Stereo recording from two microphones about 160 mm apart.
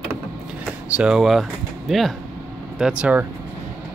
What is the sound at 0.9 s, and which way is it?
Speech, 5° right (ahead or behind).